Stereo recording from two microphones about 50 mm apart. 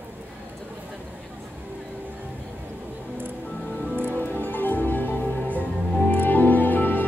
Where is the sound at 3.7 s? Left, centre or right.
Left.